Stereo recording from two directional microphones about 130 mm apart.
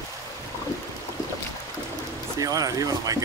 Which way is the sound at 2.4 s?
25° right (ahead or behind).